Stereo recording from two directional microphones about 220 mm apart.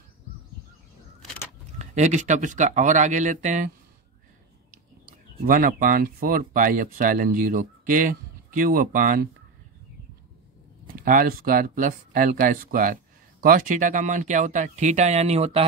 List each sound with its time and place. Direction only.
1.8 s speech: 30° right (ahead or behind)
5.4 s speech: 40° right (ahead or behind)
11.0 s speech: 40° right (ahead or behind)